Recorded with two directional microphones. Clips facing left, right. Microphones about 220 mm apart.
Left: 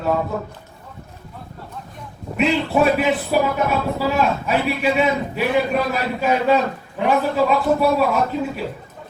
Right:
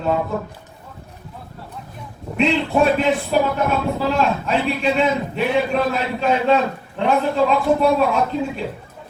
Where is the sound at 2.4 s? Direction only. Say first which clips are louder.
Even; 5° left (ahead or behind).